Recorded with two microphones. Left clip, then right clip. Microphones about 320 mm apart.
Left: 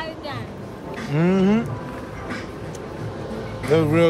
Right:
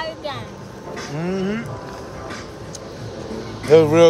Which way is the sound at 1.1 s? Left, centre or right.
Left.